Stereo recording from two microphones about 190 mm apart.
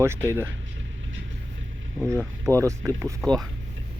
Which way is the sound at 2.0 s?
15° right (ahead or behind).